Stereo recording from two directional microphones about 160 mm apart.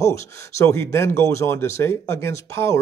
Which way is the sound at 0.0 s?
20° left (ahead or behind).